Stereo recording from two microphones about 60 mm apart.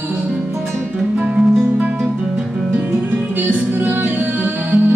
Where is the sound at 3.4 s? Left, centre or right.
Right.